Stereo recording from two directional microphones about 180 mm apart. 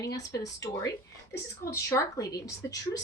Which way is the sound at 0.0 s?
20° left (ahead or behind).